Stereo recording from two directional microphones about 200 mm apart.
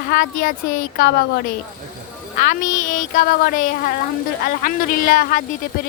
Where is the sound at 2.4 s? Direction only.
40° left (ahead or behind).